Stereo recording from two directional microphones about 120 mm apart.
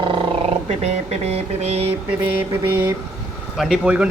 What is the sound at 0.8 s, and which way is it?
Speech, 60° right (ahead or behind).